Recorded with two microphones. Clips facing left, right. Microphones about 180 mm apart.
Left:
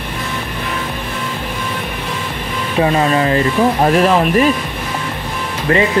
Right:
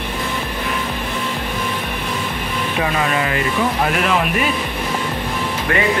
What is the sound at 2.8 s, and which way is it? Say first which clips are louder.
Speech: left 7 dB; 30° left (ahead or behind).